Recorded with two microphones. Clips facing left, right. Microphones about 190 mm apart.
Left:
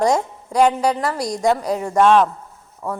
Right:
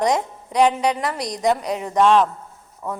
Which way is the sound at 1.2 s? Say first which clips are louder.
Left 4 dB; 25° left (ahead or behind).